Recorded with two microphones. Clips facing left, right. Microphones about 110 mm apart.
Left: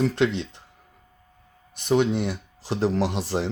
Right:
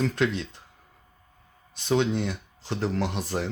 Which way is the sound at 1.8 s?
15° left (ahead or behind).